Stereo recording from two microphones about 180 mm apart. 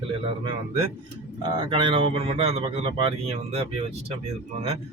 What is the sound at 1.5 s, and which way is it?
Speech, 30° right (ahead or behind).